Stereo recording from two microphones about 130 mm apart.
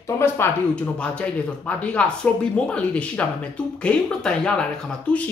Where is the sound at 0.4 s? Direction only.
20° left (ahead or behind).